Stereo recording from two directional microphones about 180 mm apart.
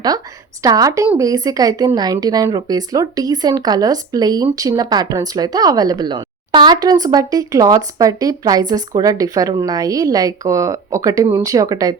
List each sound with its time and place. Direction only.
0.6 s speech: 20° right (ahead or behind)